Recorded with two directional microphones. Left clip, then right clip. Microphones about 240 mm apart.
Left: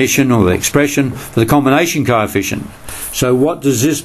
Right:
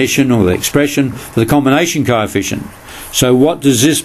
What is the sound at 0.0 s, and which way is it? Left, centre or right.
Speech, centre.